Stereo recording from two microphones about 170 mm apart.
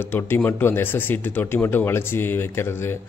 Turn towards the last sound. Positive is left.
turn(degrees=15)  # may be behind; listen again after turning